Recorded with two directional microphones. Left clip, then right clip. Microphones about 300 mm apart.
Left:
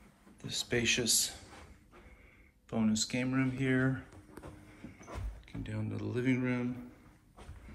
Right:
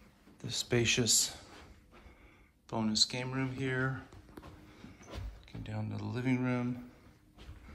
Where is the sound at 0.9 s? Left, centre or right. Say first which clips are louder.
Even; right.